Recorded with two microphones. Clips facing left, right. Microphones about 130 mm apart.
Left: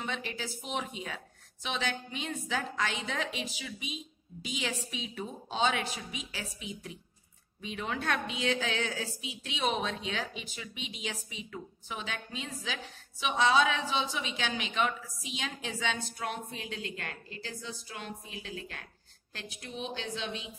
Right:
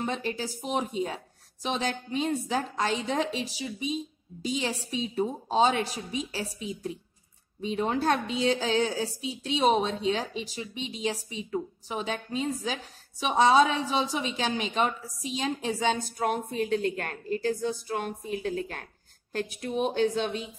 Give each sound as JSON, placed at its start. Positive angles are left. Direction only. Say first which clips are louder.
{"t": 0.0, "sound": "a woman's voice", "louder": "right 6 dB", "side_deg": -35}